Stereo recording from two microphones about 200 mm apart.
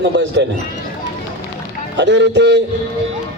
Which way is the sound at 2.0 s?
60° right (ahead or behind).